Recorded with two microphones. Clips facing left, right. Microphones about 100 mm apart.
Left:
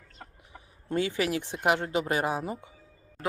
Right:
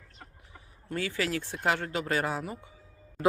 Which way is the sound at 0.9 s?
20° left (ahead or behind).